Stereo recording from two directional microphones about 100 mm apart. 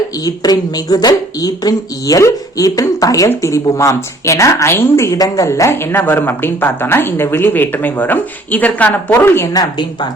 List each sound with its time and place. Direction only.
0.3 s speech: 40° left (ahead or behind); by 9.5 s 20° left (ahead or behind)
9.5 s speech: 45° left (ahead or behind)